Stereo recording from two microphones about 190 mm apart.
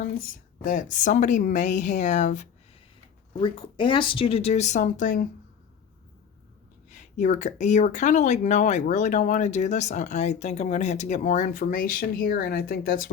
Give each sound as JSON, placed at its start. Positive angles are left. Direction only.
{"t": 0.6, "sound": "speech", "side_deg": 45}
{"t": 3.3, "sound": "speech", "side_deg": 25}
{"t": 6.9, "sound": "speech", "side_deg": 40}